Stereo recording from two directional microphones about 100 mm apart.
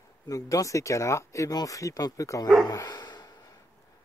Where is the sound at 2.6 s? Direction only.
45° left (ahead or behind).